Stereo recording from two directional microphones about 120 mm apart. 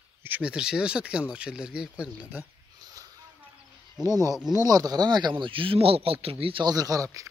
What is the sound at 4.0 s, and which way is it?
Speech, 30° right (ahead or behind).